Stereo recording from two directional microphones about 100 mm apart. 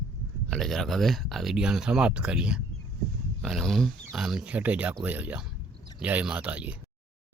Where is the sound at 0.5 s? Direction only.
Centre (ahead or behind).